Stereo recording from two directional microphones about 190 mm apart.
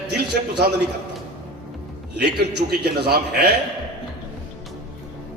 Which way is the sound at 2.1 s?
60° right (ahead or behind).